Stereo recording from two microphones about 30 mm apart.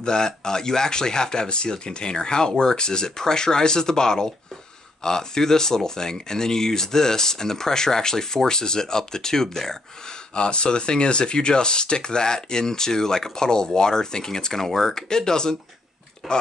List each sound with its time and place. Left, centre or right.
0.0 s speech: left
10.3 s speech: left; by 15.0 s centre
15.0 s speech: left
16.2 s speech: centre